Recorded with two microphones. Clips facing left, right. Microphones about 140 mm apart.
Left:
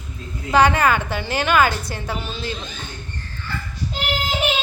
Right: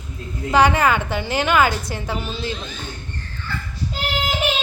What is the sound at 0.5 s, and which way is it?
A woman's voice, 15° right (ahead or behind).